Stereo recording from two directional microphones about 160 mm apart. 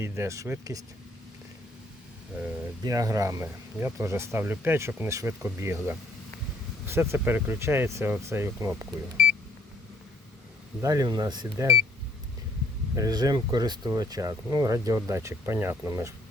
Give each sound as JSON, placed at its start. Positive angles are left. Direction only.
{"t": 0.0, "sound": "speech", "side_deg": -15}
{"t": 2.8, "sound": "speech", "side_deg": -20}
{"t": 10.8, "sound": "speech", "side_deg": -20}
{"t": 13.0, "sound": "speech", "side_deg": -25}